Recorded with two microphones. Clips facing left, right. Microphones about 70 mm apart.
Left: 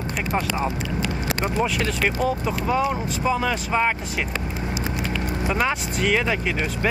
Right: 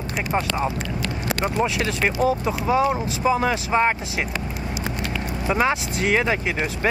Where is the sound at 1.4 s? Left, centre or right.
Centre.